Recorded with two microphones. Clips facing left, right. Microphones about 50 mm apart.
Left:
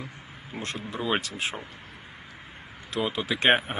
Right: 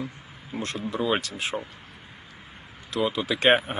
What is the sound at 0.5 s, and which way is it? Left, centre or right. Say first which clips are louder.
Speech: right 4 dB; centre.